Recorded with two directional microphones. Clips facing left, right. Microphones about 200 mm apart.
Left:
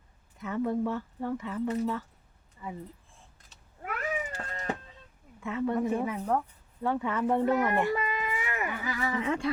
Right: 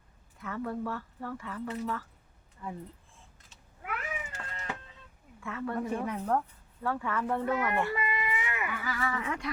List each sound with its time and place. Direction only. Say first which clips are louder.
0.4 s speech: left 5 dB; 20° left (ahead or behind)
2.6 s speech: even; 5° left (ahead or behind)
3.5 s cat: left 1 dB; 35° left (ahead or behind)
5.4 s speech: left 5 dB; 20° left (ahead or behind)
6.1 s speech: left 1 dB; 5° left (ahead or behind)
6.8 s speech: left 4 dB; 20° left (ahead or behind)
8.0 s a sound: left 1 dB; 5° right (ahead or behind)
8.4 s a sound: left 3 dB; 40° left (ahead or behind)
8.8 s speech: left 4 dB; 20° left (ahead or behind)